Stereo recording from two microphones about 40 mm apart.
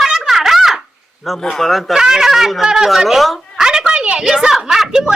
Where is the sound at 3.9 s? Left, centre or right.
Right.